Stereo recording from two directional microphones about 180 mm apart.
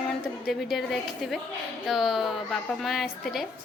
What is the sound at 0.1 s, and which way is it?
A woman's voice, centre (ahead or behind).